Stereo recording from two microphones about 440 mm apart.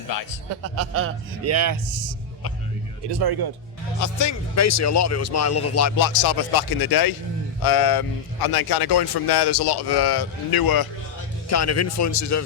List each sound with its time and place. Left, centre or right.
0.8 s a man's voice: right
3.1 s speech: right
4.0 s speech: left
6.0 s a man's voice: left
11.4 s speech: left